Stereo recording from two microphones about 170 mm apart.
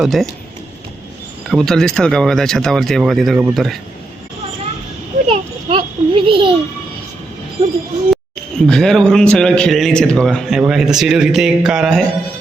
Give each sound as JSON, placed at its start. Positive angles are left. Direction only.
{"t": 0.0, "sound": "a man's voice", "side_deg": 0}
{"t": 1.5, "sound": "a man's voice", "side_deg": 0}
{"t": 5.3, "sound": "a sound", "side_deg": -35}
{"t": 8.1, "sound": "a man's voice", "side_deg": 5}